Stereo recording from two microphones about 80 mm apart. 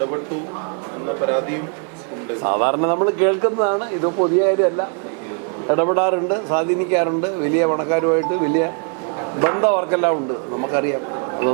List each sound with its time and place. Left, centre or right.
1.2 s a man's voice: centre